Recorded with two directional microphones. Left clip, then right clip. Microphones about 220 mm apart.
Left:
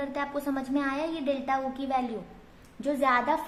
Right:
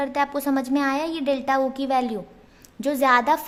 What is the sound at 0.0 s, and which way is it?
A woman's voice, 50° right (ahead or behind).